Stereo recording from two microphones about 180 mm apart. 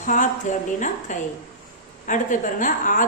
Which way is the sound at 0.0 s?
45° left (ahead or behind).